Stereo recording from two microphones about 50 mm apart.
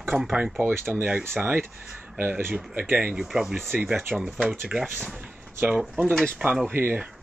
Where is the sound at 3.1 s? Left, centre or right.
Centre.